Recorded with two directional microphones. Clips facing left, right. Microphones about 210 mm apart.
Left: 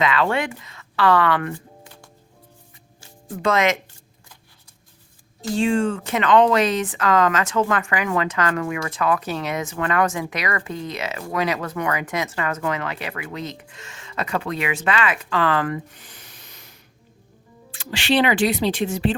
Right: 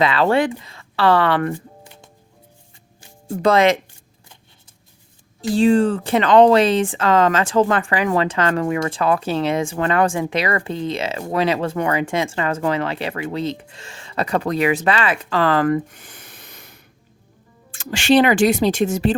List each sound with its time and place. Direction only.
0.0 s speech: 35° right (ahead or behind)
3.2 s speech: 30° right (ahead or behind)
5.5 s speech: 35° right (ahead or behind)